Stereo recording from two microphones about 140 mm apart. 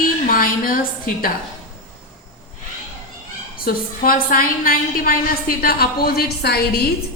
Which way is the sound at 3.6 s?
90° left.